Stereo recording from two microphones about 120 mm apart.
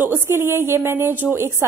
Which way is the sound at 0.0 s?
20° right (ahead or behind).